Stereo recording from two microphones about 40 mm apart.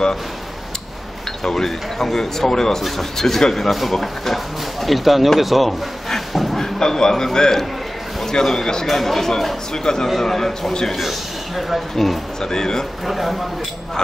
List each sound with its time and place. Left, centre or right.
1.4 s speech: centre
5.4 s a sound: centre
6.6 s speech: centre
11.0 s a man's voice: centre
12.4 s speech: centre
13.0 s speech: centre